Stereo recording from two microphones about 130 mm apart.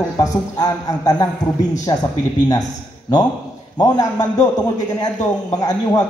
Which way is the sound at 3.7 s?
30° left (ahead or behind).